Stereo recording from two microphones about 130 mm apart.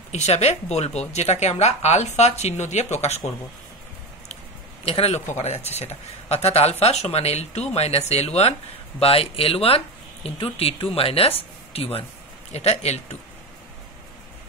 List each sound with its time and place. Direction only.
0.1 s speech: 60° left (ahead or behind)
4.8 s speech: 50° left (ahead or behind)